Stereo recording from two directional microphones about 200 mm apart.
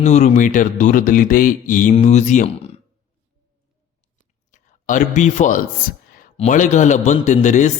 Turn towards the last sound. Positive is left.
turn(degrees=35)  # may be behind; listen again after turning